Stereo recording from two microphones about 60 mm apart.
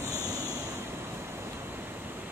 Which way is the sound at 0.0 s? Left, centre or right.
Left.